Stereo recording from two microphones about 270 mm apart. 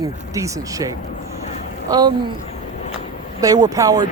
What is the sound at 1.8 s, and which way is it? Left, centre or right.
Speech, centre.